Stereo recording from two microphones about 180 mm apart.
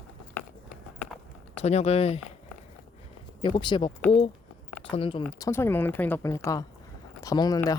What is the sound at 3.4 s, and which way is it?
Speech, 25° left (ahead or behind).